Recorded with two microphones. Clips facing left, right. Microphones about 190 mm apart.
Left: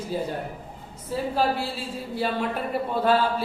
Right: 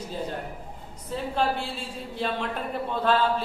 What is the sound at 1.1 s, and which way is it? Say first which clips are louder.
A woman's voice: left 2 dB; 5° left (ahead or behind).